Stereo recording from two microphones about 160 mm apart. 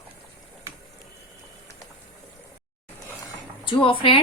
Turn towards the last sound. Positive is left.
turn(degrees=35)  # may be behind; listen again after turning